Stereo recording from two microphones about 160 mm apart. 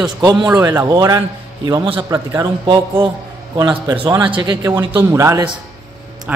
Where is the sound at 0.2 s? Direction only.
25° right (ahead or behind).